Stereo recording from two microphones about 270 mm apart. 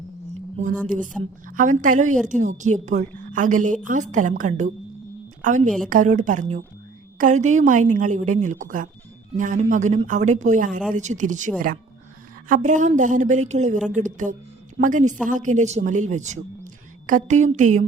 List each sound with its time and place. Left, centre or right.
0.5 s a woman's voice: right
12.6 s a woman's voice: right